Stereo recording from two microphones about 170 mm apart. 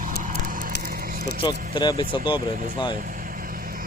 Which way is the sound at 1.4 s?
25° left (ahead or behind).